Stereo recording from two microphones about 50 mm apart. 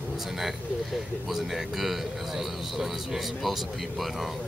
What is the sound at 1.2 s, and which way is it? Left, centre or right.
A man's voice, centre.